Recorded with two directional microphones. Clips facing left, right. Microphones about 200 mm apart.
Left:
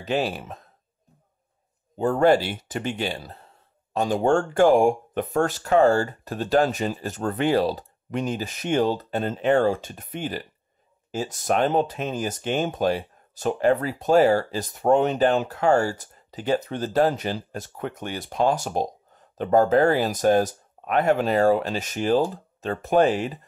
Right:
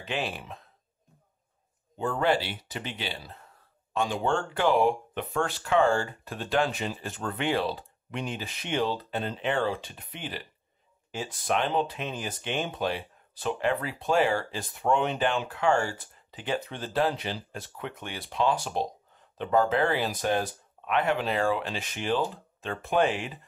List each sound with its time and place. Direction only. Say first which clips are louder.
0.0 s speech: left 7 dB; 40° left (ahead or behind)
2.0 s speech: left 8 dB; 45° left (ahead or behind)
3.3 s speech: left 2 dB; 35° left (ahead or behind)